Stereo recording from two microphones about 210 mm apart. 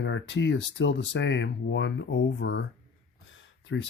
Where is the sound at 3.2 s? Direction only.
60° left (ahead or behind).